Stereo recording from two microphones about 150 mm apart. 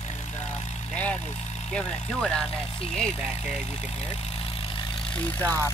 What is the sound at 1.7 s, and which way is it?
Speech, 5° left (ahead or behind).